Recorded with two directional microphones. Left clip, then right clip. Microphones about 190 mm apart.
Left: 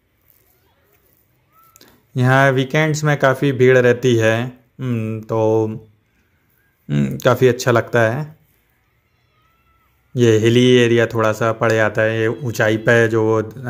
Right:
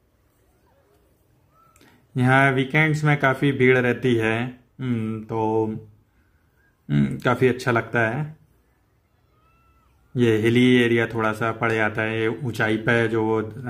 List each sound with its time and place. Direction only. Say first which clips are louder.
1.8 s speech: left 3 dB; 15° left (ahead or behind)
6.9 s speech: left 6 dB; 10° left (ahead or behind)
10.1 s speech: left 6 dB; 15° left (ahead or behind)